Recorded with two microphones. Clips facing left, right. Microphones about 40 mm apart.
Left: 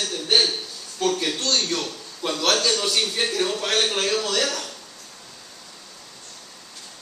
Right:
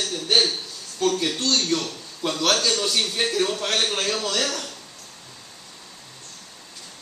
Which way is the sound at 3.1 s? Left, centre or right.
Centre.